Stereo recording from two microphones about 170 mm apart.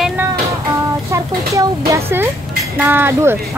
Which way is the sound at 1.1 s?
20° right (ahead or behind).